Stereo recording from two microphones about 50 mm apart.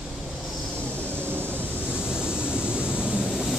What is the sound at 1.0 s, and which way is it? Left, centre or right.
Vehicle, right.